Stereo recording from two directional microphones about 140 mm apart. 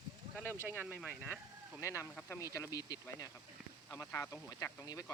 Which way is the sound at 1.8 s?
20° left (ahead or behind).